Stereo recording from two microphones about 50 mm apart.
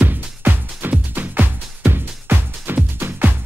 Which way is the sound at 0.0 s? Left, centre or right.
Right.